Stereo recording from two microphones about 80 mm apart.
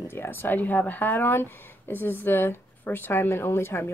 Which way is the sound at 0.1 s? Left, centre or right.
Left.